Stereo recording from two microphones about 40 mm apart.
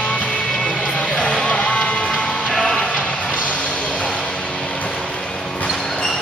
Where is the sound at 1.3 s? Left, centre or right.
Left.